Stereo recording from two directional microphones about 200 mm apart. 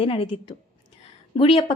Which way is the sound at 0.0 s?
30° left (ahead or behind).